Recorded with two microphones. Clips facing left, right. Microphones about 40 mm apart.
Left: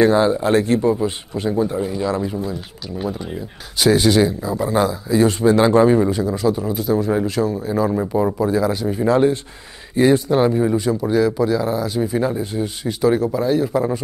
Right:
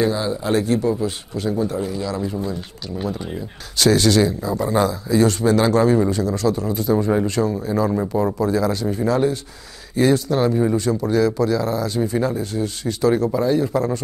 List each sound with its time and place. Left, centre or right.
0.0 s speech: left
0.8 s speech: left
3.0 s a man's voice: centre
5.2 s a man's voice: centre
9.0 s a man's voice: left; by 14.0 s centre